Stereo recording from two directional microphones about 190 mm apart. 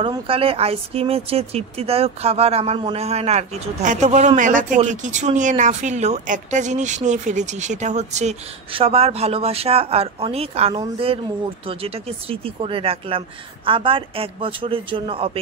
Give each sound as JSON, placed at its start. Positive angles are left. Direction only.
{"t": 0.0, "sound": "speech", "side_deg": -30}